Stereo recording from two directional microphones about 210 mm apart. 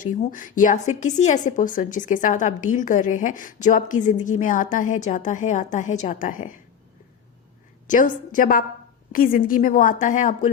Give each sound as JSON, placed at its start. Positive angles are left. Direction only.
{"t": 0.0, "sound": "a woman's voice", "side_deg": 40}
{"t": 7.9, "sound": "a woman's voice", "side_deg": 40}